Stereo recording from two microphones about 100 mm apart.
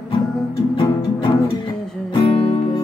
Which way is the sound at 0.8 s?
50° left (ahead or behind).